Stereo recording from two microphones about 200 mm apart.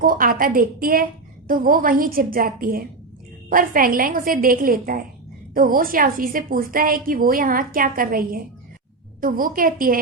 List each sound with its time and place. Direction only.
0.0 s a woman's voice: 45° right (ahead or behind)